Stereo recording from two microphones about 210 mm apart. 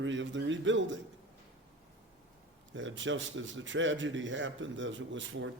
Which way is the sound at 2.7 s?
65° right (ahead or behind).